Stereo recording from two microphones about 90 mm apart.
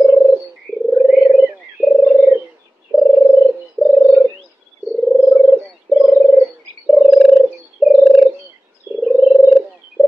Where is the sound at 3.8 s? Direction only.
20° right (ahead or behind).